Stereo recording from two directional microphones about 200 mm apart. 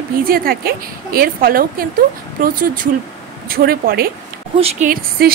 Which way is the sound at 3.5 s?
50° right (ahead or behind).